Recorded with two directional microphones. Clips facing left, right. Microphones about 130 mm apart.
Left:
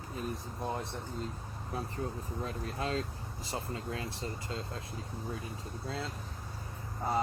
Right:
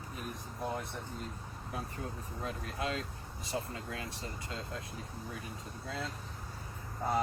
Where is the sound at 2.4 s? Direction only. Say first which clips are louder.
Even; 35° left (ahead or behind).